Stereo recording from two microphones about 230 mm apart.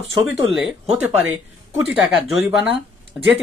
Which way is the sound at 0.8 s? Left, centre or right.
Right.